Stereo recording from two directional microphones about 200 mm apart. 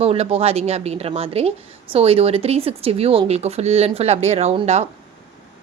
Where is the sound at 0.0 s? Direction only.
30° right (ahead or behind).